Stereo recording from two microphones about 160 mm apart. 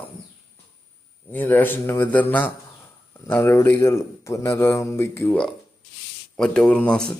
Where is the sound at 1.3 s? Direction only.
10° left (ahead or behind).